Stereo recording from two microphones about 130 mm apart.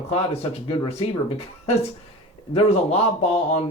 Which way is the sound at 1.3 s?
50° left (ahead or behind).